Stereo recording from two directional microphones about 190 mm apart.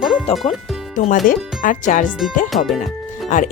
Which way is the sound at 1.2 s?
45° left (ahead or behind).